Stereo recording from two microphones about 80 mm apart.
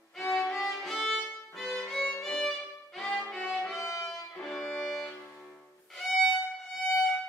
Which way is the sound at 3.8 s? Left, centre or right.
Left.